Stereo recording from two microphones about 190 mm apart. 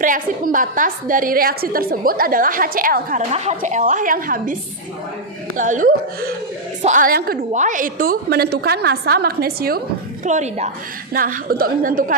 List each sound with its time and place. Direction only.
0.0 s a woman's voice: 45° right (ahead or behind)
5.5 s a woman's voice: 45° right (ahead or behind)
10.2 s a woman's voice: 40° right (ahead or behind)
11.1 s a woman's voice: 50° right (ahead or behind)